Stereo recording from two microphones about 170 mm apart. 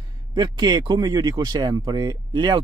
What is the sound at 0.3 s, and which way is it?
Speech, 25° right (ahead or behind).